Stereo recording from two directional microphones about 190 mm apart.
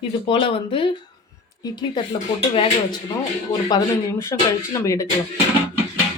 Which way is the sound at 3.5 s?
20° left (ahead or behind).